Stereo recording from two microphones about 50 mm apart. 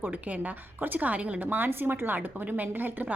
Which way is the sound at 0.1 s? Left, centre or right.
Right.